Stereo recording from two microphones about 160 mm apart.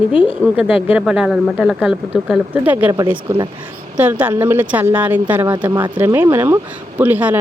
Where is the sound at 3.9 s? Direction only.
10° right (ahead or behind).